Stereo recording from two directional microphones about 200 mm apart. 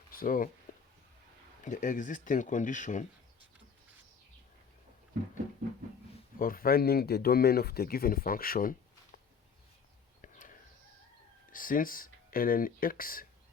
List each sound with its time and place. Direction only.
0.1 s speech: 45° left (ahead or behind)
1.6 s speech: 40° left (ahead or behind)
6.4 s speech: 45° left (ahead or behind)
10.2 s a sound: 40° left (ahead or behind)
11.5 s speech: 45° left (ahead or behind)